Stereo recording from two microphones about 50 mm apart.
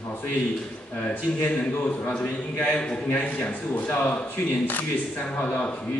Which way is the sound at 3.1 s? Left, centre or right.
Left.